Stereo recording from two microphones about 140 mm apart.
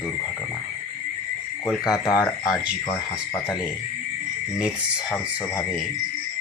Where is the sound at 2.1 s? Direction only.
15° left (ahead or behind).